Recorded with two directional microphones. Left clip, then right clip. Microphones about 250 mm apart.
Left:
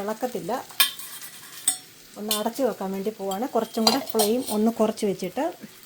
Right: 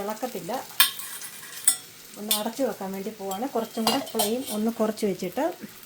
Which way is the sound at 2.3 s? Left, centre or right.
Left.